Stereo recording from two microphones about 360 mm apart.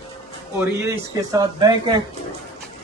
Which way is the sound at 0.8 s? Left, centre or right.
Centre.